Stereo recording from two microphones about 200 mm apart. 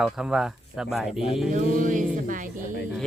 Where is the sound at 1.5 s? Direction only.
40° right (ahead or behind).